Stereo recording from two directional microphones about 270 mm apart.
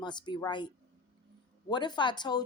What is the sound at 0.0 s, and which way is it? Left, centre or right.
Speech, centre.